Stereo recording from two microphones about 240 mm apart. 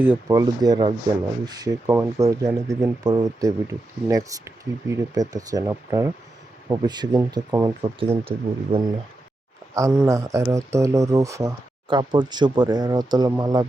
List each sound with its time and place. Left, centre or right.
0.0 s speech: centre
9.7 s speech: centre